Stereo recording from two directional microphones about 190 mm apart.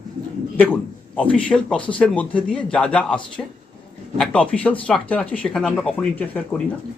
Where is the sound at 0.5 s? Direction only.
10° left (ahead or behind).